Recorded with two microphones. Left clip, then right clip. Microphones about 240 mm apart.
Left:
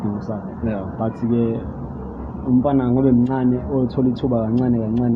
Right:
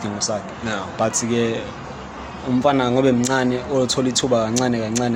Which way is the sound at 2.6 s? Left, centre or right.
Right.